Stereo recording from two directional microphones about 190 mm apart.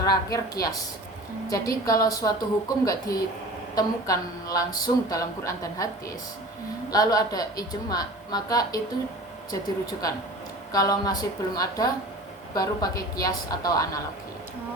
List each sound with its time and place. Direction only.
0.0 s a woman's voice: 20° left (ahead or behind)
6.9 s a woman's voice: 20° left (ahead or behind)